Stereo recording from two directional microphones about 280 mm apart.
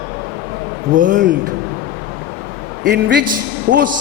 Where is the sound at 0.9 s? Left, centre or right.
Right.